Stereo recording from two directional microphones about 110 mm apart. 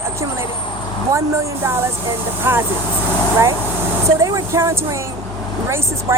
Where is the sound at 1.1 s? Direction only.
25° right (ahead or behind).